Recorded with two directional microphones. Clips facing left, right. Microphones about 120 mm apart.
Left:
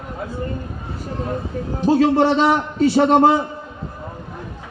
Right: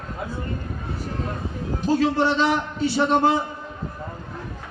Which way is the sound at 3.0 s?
35° left (ahead or behind).